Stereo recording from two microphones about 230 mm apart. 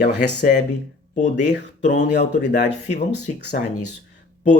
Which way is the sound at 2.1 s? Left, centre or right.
Left.